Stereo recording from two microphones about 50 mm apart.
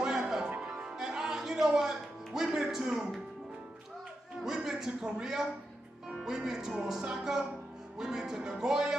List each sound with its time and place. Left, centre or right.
0.0 s music: centre
4.5 s a man's voice: centre